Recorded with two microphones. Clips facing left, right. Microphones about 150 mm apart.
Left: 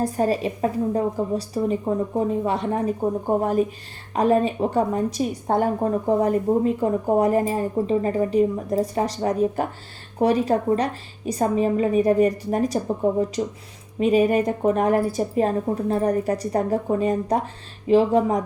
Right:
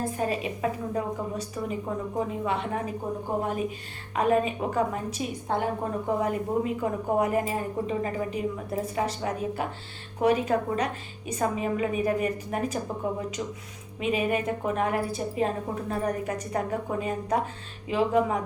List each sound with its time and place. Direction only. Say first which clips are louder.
0.0 s a woman's voice: left 7 dB; 40° left (ahead or behind)
5.5 s a woman's voice: left 7 dB; 45° left (ahead or behind)
6.1 s a woman's voice: left 7 dB; 35° left (ahead or behind)